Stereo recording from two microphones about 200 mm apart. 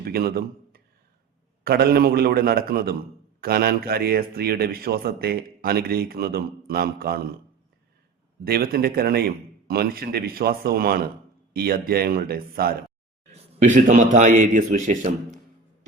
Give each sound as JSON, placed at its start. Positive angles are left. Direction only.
{"t": 0.0, "sound": "a man's voice", "side_deg": -50}
{"t": 8.4, "sound": "a man's voice", "side_deg": -50}